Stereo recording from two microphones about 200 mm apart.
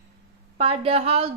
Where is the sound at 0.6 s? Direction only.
30° right (ahead or behind).